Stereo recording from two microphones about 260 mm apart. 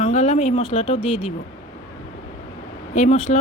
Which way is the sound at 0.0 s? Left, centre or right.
Left.